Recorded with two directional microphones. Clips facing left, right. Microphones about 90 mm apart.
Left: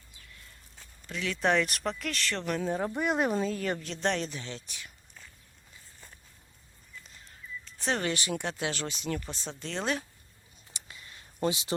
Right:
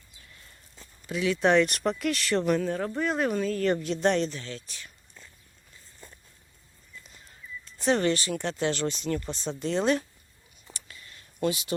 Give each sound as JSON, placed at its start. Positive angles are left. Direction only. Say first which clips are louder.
{"t": 1.0, "sound": "speech", "louder": "right 5 dB", "side_deg": -10}
{"t": 2.6, "sound": "speech", "louder": "right 2 dB", "side_deg": 15}
{"t": 3.8, "sound": "speech", "louder": "right 6 dB", "side_deg": -5}
{"t": 4.3, "sound": "speech", "louder": "right 2 dB", "side_deg": 15}
{"t": 7.8, "sound": "speech", "louder": "right 6 dB", "side_deg": 0}
{"t": 8.1, "sound": "speech", "louder": "right 3 dB", "side_deg": 15}
{"t": 10.8, "sound": "a sound", "louder": "left 2 dB", "side_deg": 20}
{"t": 11.4, "sound": "speech", "louder": "right 2 dB", "side_deg": 25}